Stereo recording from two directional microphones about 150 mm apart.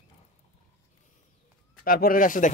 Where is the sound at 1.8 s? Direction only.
75° left (ahead or behind).